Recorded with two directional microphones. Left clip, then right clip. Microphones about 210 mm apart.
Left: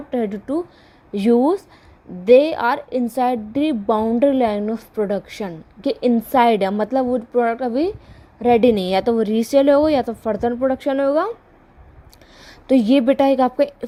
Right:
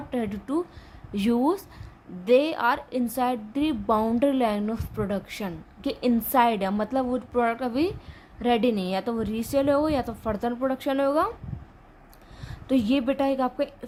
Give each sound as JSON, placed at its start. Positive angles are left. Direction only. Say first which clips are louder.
{"t": 0.1, "sound": "a woman's voice", "louder": "left 7 dB", "side_deg": 20}
{"t": 12.4, "sound": "a woman's voice", "louder": "left 9 dB", "side_deg": 30}